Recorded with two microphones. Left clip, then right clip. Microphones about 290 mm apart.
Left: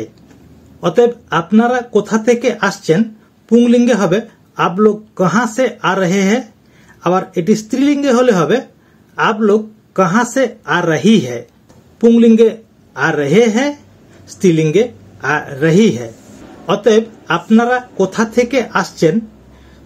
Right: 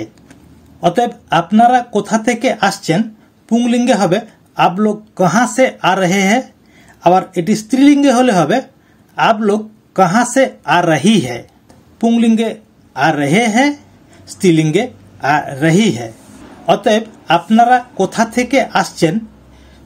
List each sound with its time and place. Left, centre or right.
0.7 s speech: right